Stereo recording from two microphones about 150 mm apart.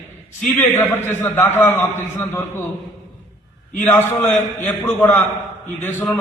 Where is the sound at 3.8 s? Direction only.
15° left (ahead or behind).